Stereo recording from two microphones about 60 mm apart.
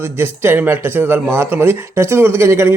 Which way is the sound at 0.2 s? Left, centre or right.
Right.